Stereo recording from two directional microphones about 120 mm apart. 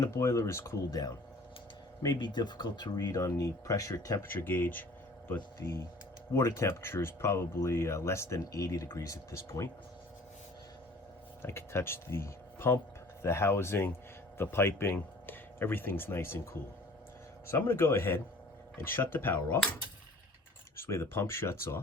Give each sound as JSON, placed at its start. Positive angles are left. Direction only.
{"t": 0.0, "sound": "speech", "side_deg": 25}
{"t": 4.3, "sound": "speech", "side_deg": 15}
{"t": 11.4, "sound": "speech", "side_deg": 20}
{"t": 20.7, "sound": "speech", "side_deg": 20}